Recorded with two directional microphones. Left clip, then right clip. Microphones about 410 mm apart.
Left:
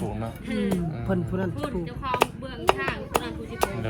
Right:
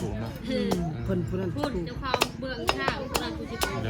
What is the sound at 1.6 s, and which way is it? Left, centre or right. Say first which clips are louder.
Speech: right 1 dB; centre.